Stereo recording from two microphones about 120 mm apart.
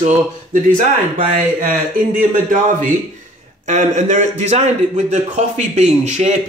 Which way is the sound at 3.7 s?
85° right.